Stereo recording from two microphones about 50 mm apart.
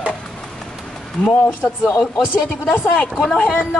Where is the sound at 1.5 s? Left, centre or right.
Left.